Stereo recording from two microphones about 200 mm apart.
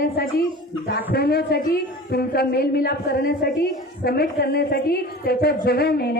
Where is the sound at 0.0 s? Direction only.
50° left (ahead or behind).